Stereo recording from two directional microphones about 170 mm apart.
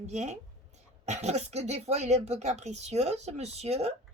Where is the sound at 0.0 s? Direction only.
40° right (ahead or behind).